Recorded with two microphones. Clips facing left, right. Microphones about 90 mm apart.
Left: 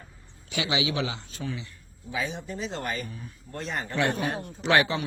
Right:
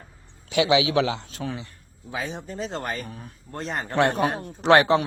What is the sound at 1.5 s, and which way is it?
A man's voice, 40° right (ahead or behind).